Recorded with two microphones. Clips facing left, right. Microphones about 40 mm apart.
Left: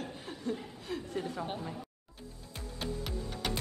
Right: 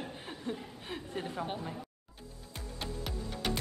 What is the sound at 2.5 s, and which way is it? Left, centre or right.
Music, centre.